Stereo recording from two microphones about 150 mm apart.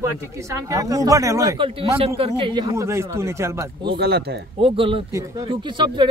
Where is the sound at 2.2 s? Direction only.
35° right (ahead or behind); by 3.6 s 20° right (ahead or behind).